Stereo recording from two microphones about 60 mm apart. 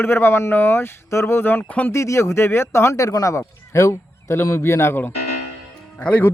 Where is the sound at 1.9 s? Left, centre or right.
Left.